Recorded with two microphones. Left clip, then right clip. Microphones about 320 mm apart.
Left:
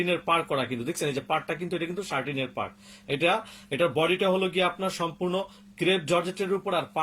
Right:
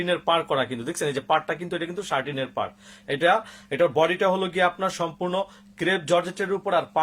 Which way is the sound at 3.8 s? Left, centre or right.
Right.